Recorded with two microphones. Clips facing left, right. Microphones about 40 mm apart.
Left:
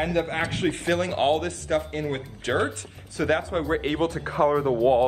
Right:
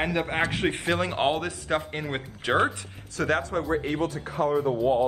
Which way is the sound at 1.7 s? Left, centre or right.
Right.